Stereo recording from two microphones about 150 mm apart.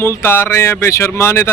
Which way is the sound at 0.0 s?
15° left (ahead or behind).